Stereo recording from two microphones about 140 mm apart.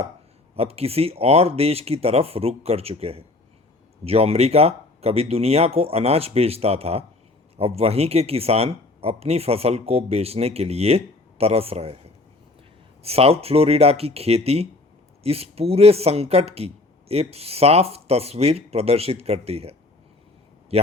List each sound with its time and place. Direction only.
0.5 s speech: 45° right (ahead or behind)